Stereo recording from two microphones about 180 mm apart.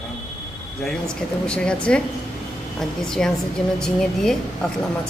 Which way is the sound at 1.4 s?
5° left (ahead or behind).